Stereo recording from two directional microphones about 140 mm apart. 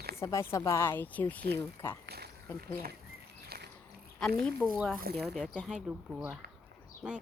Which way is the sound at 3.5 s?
90° right.